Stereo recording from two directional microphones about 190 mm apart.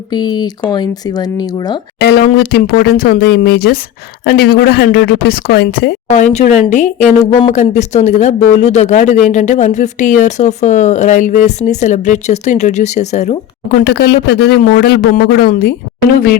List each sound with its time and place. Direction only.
0.1 s speech: 25° left (ahead or behind)
2.0 s a man's voice: 55° left (ahead or behind)
6.1 s speech: 40° left (ahead or behind)
13.8 s a man's voice: 60° left (ahead or behind)